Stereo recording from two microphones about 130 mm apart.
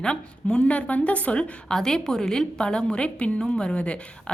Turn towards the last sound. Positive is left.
turn(degrees=10)  # may be behind; listen again after turning